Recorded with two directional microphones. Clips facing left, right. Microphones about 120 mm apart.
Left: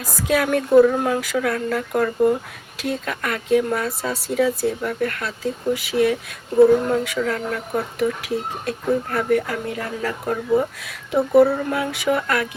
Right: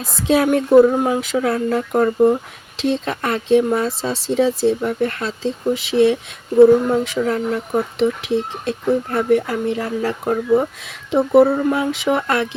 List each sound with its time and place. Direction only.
0.0 s speech: 25° right (ahead or behind)